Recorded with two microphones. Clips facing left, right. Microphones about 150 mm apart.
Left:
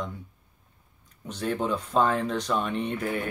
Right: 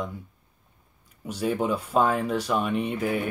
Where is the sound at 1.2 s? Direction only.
10° right (ahead or behind).